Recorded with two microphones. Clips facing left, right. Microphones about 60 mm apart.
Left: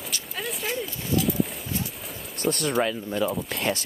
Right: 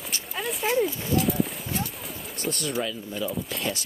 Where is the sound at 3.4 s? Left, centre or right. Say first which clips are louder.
Left 3 dB; left.